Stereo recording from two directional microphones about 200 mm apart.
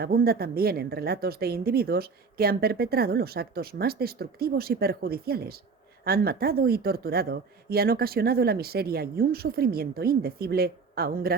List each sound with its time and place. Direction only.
0.0 s a woman's voice: 50° right (ahead or behind)